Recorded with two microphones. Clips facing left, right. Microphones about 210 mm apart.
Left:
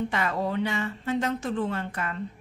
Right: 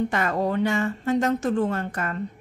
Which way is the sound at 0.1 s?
45° right (ahead or behind).